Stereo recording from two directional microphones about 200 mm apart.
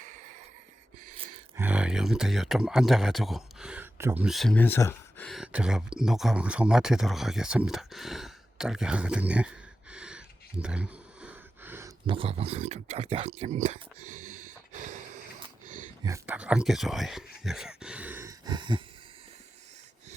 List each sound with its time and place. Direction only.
1.5 s speech: 5° right (ahead or behind)
12.0 s speech: 25° right (ahead or behind)
14.1 s snort: 40° right (ahead or behind)
16.0 s speech: 10° right (ahead or behind)